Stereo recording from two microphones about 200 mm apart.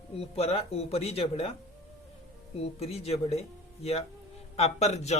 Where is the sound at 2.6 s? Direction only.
30° left (ahead or behind).